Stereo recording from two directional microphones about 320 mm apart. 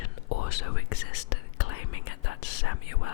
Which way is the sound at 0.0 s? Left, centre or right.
Left.